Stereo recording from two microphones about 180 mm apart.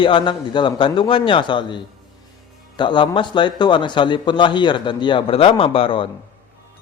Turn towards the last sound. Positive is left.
turn(degrees=30)  # may be behind; listen again after turning